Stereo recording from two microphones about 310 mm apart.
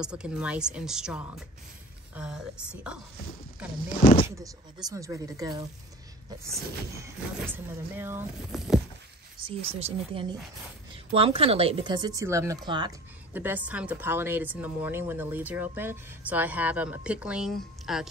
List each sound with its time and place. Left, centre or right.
0.0 s a woman's voice: centre
4.0 s speech: centre
4.4 s speech: centre
9.4 s speech: centre